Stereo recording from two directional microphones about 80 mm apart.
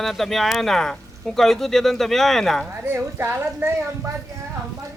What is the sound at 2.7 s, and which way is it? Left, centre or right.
Speech, right.